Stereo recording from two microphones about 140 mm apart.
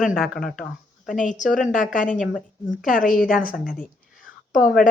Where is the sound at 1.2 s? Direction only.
65° left (ahead or behind).